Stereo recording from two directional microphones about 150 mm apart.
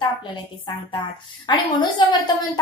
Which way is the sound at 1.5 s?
30° left (ahead or behind).